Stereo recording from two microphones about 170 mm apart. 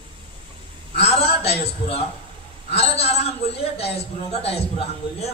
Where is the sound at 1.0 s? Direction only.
35° left (ahead or behind).